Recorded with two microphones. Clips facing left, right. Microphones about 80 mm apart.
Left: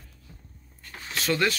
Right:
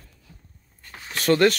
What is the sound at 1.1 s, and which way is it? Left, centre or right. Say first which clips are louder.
Speech: right 7 dB; right.